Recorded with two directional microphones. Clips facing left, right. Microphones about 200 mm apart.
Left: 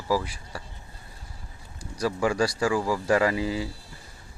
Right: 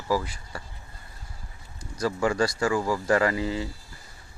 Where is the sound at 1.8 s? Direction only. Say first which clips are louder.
Even; 10° left (ahead or behind).